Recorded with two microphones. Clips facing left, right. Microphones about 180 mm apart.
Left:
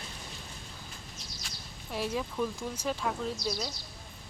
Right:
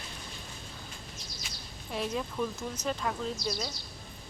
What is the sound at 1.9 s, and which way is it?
Speech, 5° left (ahead or behind).